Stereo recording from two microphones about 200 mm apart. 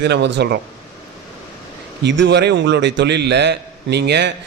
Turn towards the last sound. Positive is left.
turn(degrees=-55)  # may be behind; listen again after turning